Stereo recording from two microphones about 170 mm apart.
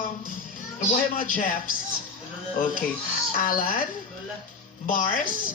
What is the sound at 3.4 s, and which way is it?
Speech, 55° left (ahead or behind).